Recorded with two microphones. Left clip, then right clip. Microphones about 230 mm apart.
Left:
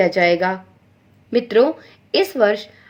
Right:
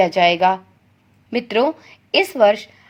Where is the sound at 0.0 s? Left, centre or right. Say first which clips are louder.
Right 1 dB; right.